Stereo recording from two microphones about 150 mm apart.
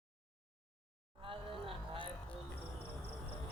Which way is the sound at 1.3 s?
35° right (ahead or behind).